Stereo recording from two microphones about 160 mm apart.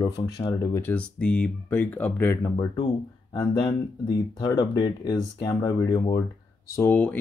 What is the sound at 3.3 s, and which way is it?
Speech, 30° left (ahead or behind).